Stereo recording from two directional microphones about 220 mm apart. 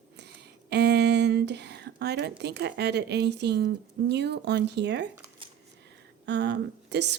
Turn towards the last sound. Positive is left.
turn(degrees=-50)  # may be behind; listen again after turning